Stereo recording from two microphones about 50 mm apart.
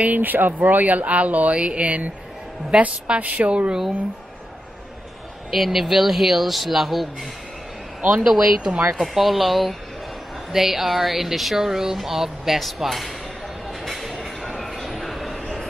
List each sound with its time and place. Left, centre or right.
0.0 s speech: right
1.6 s a woman's voice: centre
5.5 s speech: centre
8.1 s speech: centre
9.0 s speech: centre
13.7 s a sound: centre